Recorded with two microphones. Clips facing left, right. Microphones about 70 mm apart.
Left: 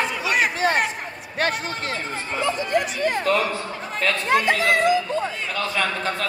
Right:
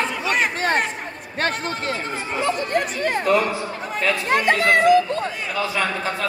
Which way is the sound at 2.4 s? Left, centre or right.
Right.